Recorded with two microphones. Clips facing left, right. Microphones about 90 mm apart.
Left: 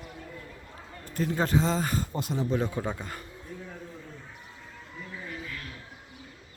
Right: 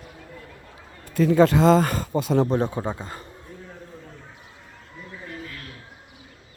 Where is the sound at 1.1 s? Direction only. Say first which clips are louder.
Right 9 dB; 90° right.